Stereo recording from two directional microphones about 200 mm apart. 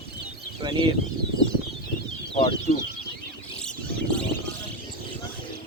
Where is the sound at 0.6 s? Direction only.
25° right (ahead or behind).